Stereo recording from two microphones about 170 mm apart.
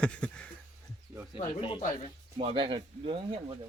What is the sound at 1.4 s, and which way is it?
Speech, 30° left (ahead or behind).